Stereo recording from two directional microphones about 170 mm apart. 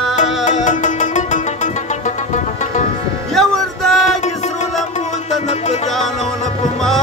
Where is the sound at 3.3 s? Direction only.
Centre (ahead or behind).